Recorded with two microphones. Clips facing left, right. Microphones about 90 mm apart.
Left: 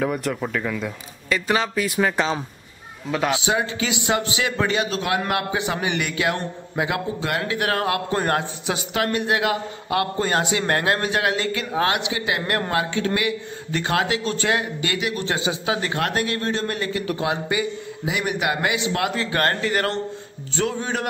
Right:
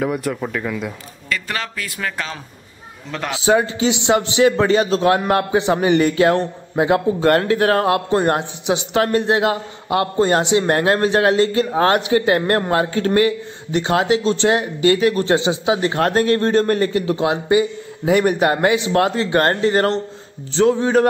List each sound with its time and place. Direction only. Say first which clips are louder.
0.0 s speech: right 2 dB; 5° right (ahead or behind)
1.3 s speech: left 4 dB; 20° left (ahead or behind)
3.1 s speech: left 4 dB; 5° left (ahead or behind)
3.3 s a man's voice: right 7 dB; 35° right (ahead or behind)
7.2 s a man's voice: right 9 dB; 45° right (ahead or behind)
13.7 s speech: right 6 dB; 20° right (ahead or behind); by 17.0 s 40° right (ahead or behind)
17.0 s a man's voice: right 5 dB; 25° right (ahead or behind)
18.0 s speech: right 9 dB; 40° right (ahead or behind)